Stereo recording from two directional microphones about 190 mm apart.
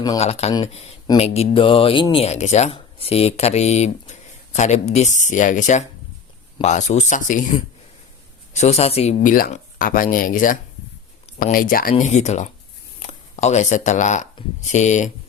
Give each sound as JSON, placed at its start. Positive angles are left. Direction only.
{"t": 0.2, "sound": "speech", "side_deg": 35}
{"t": 9.2, "sound": "speech", "side_deg": 45}